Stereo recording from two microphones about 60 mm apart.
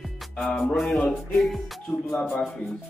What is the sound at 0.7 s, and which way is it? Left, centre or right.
Speech, centre.